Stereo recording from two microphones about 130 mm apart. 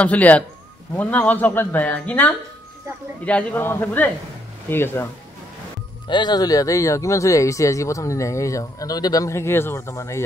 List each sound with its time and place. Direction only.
0.0 s speech: 10° left (ahead or behind)
6.0 s speech: 35° left (ahead or behind)